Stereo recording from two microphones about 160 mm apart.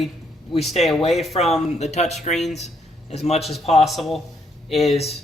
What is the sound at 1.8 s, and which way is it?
Speech, 45° left (ahead or behind).